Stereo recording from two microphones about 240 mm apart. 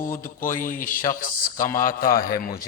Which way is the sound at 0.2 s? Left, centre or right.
Left.